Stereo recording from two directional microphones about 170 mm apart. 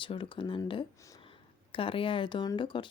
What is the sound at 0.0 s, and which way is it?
Speech, 30° left (ahead or behind).